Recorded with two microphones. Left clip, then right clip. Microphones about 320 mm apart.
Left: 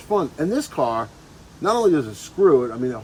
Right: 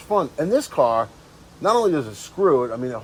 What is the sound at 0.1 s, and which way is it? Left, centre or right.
A man's voice, centre.